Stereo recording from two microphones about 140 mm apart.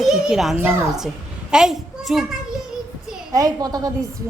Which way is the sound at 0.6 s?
15° right (ahead or behind).